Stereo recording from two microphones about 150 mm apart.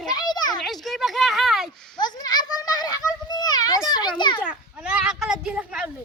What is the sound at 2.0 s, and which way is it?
Children playing, 30° left (ahead or behind).